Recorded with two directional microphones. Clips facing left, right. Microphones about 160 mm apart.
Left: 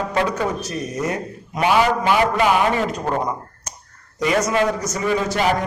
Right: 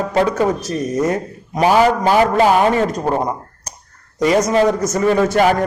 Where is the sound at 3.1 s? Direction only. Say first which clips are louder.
Right 3 dB; 30° right (ahead or behind).